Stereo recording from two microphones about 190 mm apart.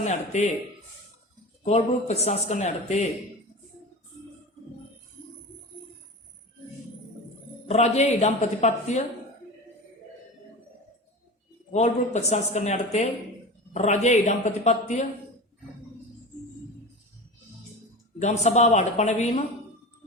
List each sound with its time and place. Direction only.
0.0 s a man's voice: 35° left (ahead or behind)
1.6 s speech: 35° left (ahead or behind)
7.7 s speech: 35° left (ahead or behind)
11.7 s speech: 35° left (ahead or behind)
18.2 s speech: 35° left (ahead or behind)